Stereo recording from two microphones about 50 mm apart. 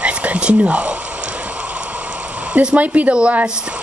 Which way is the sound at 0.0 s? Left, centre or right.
Right.